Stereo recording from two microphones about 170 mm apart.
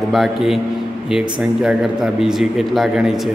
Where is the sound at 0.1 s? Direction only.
Centre (ahead or behind).